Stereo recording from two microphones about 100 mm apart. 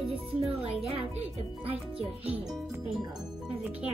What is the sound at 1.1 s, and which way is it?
Speech, 75° right (ahead or behind).